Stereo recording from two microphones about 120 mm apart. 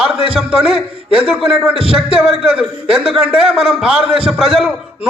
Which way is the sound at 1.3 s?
5° right (ahead or behind).